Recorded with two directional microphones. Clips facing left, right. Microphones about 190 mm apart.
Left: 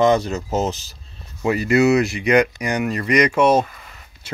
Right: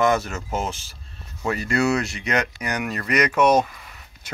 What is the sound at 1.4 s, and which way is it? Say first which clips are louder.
Speech: left 6 dB; 15° left (ahead or behind).